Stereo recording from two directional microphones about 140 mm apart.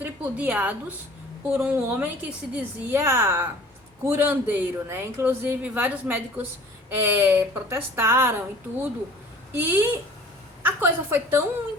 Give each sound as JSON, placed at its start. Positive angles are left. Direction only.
{"t": 0.0, "sound": "a woman's voice", "side_deg": -10}